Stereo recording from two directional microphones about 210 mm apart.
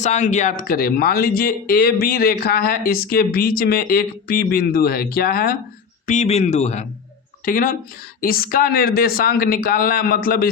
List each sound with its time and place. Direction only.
0.0 s speech: 35° left (ahead or behind)
6.1 s speech: 30° left (ahead or behind)